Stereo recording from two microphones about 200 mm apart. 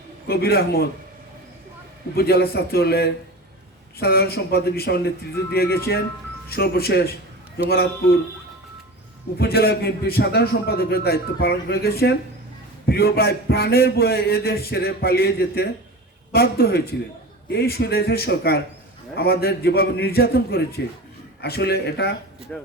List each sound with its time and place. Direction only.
0.3 s a man's voice: 50° left (ahead or behind)
2.1 s a man's voice: 50° left (ahead or behind)
9.4 s a man's voice: 50° left (ahead or behind)
22.5 s speech: 5° left (ahead or behind)